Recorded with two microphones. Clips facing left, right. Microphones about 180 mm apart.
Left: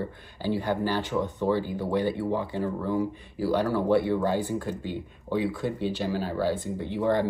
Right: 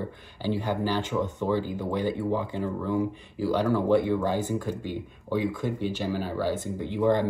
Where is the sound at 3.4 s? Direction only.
15° right (ahead or behind).